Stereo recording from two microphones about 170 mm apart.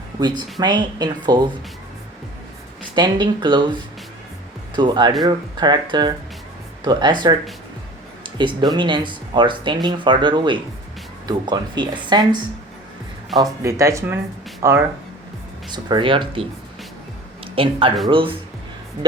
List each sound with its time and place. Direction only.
0.2 s speech: 25° right (ahead or behind)
2.9 s speech: 25° right (ahead or behind)
15.7 s speech: 25° right (ahead or behind)